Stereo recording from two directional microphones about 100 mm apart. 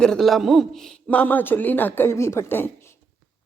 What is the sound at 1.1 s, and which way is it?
A woman's voice, 15° left (ahead or behind).